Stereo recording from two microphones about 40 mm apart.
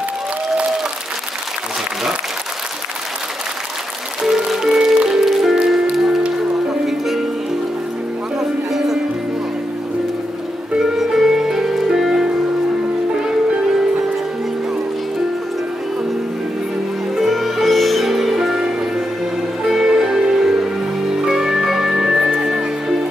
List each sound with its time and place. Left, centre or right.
4.2 s music: centre
8.4 s music: centre
10.8 s music: centre
17.1 s music: centre
19.6 s music: centre